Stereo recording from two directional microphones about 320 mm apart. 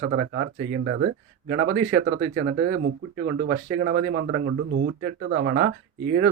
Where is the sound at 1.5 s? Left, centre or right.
Right.